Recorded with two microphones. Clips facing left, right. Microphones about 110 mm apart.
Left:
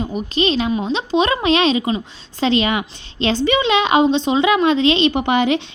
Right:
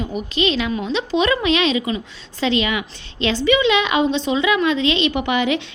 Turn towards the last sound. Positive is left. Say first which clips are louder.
# left 3 dB
turn(degrees=35)  # may be behind; listen again after turning